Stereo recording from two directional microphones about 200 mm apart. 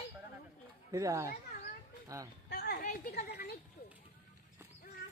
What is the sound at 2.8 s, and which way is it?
Speech, 50° left (ahead or behind).